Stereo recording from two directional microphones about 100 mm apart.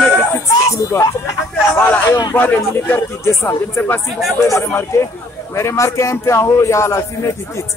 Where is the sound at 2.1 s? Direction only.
35° left (ahead or behind).